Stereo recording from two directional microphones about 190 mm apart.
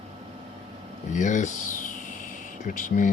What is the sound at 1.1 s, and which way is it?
Speech, 40° left (ahead or behind).